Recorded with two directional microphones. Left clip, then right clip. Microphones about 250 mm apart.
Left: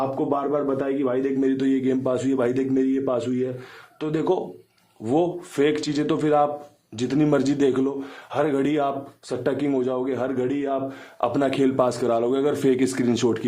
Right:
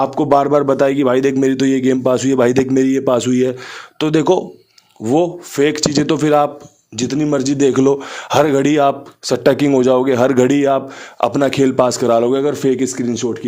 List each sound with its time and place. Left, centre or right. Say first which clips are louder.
0.2 s a man's voice: right 11 dB; right
8.1 s a man's voice: right 10 dB; right
11.3 s a man's voice: right 6 dB; right; by 13.4 s centre